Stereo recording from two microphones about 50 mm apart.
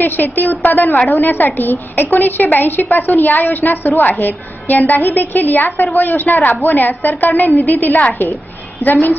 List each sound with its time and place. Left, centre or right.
0.0 s a woman's voice: left